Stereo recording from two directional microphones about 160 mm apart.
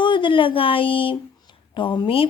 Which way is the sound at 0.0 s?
30° left (ahead or behind).